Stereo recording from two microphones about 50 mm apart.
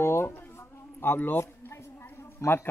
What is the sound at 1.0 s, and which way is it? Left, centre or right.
Speech, left.